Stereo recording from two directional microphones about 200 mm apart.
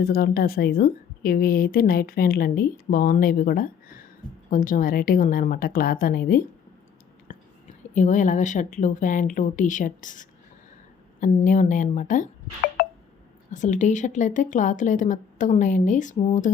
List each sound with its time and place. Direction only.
0.0 s a woman's voice: 50° left (ahead or behind)
7.3 s whispering: 40° left (ahead or behind)
7.9 s speech: 40° left (ahead or behind)